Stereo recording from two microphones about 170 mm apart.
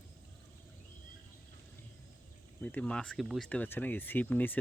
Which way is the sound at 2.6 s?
10° left (ahead or behind).